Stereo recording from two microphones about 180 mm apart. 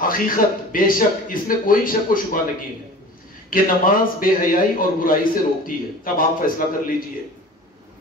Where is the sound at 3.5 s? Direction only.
50° left (ahead or behind).